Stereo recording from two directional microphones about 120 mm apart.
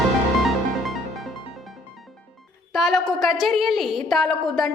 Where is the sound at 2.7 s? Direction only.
Centre (ahead or behind).